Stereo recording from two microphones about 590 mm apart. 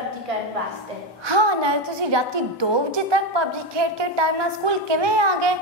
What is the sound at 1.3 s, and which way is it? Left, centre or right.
A woman's voice, right.